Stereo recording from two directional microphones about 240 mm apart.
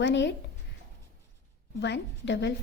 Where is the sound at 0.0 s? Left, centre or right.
Left.